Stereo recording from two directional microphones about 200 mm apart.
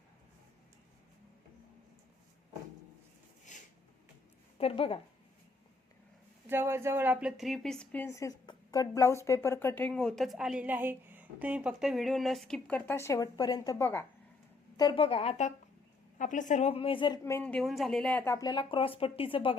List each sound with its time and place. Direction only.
3.5 s a sound: 40° left (ahead or behind)
4.5 s speech: 30° left (ahead or behind)
6.5 s a woman's voice: 10° right (ahead or behind); by 17.2 s 25° left (ahead or behind)
17.2 s speech: 10° left (ahead or behind); by 19.5 s 25° left (ahead or behind)